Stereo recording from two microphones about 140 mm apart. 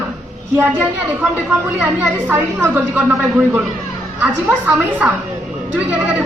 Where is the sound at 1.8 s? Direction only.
15° right (ahead or behind).